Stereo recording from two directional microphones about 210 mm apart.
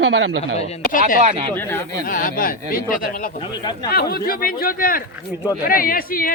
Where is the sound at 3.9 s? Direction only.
50° left (ahead or behind).